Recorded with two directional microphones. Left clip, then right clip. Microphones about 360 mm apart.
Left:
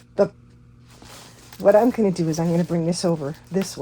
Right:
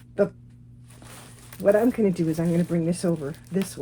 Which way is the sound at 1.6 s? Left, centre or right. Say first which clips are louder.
Left 4 dB; centre.